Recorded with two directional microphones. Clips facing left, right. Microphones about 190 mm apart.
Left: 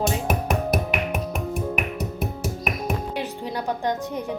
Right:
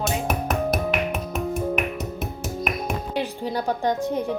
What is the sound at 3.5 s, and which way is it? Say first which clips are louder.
Speech: right 2 dB; 30° right (ahead or behind).